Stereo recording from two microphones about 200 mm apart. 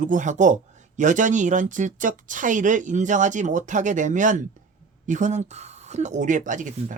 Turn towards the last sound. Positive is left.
turn(degrees=-40)  # may be behind; listen again after turning